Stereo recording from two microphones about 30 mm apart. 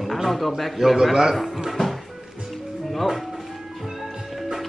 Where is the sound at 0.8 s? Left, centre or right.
Centre.